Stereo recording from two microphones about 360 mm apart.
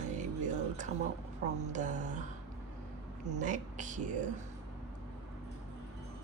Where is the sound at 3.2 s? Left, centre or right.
Centre.